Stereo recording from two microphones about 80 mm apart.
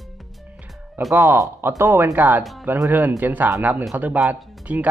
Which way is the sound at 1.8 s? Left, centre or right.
Right.